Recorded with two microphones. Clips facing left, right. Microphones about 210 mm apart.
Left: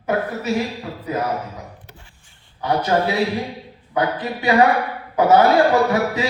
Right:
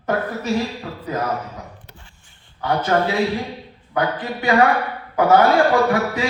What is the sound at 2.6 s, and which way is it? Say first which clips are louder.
A man's voice: even; 20° left (ahead or behind).